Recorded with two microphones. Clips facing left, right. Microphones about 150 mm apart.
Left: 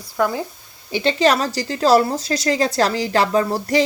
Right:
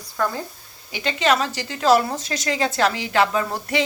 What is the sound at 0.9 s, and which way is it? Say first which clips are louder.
A woman's voice: left 4 dB; 30° left (ahead or behind).